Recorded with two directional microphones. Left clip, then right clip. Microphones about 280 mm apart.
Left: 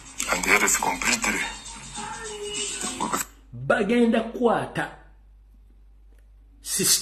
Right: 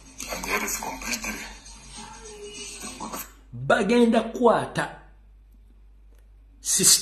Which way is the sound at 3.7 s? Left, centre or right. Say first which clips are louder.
Right 1 dB; centre.